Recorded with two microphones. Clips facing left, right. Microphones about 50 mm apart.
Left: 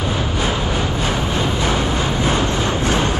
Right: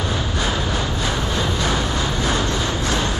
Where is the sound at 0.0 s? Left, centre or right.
Left.